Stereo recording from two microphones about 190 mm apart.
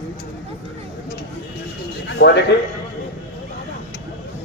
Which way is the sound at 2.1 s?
65° left (ahead or behind).